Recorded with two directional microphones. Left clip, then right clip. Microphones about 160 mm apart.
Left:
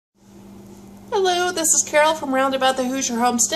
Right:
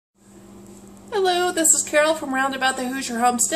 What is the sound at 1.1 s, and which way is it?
A woman's voice, 20° right (ahead or behind).